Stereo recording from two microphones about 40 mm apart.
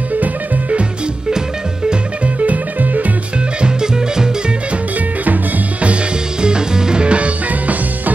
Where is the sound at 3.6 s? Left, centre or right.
Centre.